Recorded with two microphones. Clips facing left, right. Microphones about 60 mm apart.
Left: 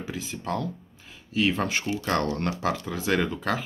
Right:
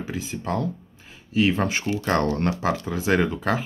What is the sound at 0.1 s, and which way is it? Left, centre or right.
Speech, right.